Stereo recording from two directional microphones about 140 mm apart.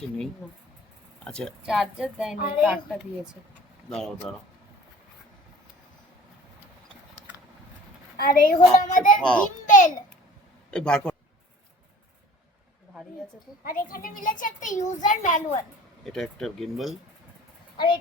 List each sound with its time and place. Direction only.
1.2 s a woman's voice: 5° left (ahead or behind)
8.1 s a child's voice: 90° left; by 9.1 s 65° left (ahead or behind)
9.2 s a child's voice: 10° left (ahead or behind)
9.6 s a child's voice: 70° left (ahead or behind)
10.7 s a man's voice: 5° left (ahead or behind)
13.7 s a child's voice: 85° left; by 15.6 s 60° left (ahead or behind)
16.0 s a woman's voice: 5° left (ahead or behind)